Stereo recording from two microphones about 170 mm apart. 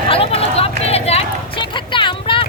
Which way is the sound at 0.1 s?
35° left (ahead or behind).